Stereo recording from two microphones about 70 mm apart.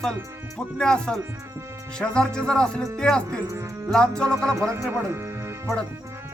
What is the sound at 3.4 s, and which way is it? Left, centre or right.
Speech, right.